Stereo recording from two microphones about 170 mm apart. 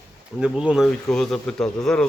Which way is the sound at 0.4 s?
5° right (ahead or behind).